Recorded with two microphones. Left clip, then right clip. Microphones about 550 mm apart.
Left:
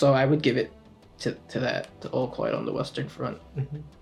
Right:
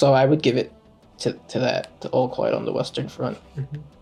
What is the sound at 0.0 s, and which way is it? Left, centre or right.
Speech, right.